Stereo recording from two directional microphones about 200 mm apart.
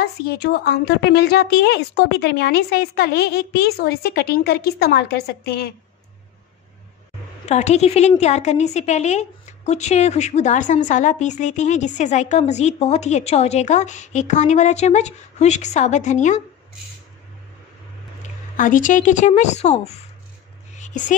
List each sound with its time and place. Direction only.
0.0 s a woman's voice: 55° left (ahead or behind)
7.4 s a woman's voice: 35° left (ahead or behind)
18.2 s a woman's voice: 40° left (ahead or behind)
20.7 s a sound: 40° left (ahead or behind)